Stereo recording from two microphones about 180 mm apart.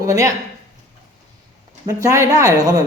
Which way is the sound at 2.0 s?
15° right (ahead or behind).